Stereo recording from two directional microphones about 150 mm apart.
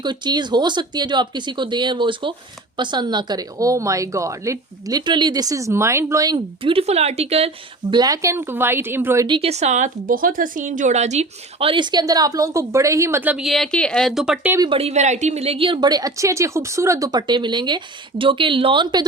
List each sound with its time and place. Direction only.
0.0 s a woman's voice: 30° right (ahead or behind)
6.6 s speech: 40° right (ahead or behind); by 9.2 s 15° right (ahead or behind)
9.2 s speech: 35° right (ahead or behind); by 14.5 s 5° right (ahead or behind)
14.7 s a woman's voice: 45° right (ahead or behind)